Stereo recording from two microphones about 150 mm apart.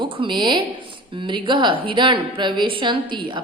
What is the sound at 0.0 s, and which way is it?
A woman's voice, 30° right (ahead or behind).